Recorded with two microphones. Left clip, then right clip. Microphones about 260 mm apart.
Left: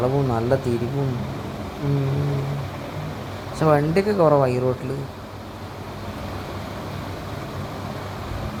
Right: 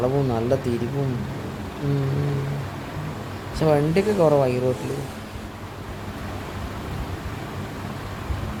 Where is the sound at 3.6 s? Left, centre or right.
Centre.